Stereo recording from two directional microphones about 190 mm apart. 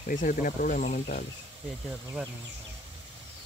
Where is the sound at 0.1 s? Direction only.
45° left (ahead or behind).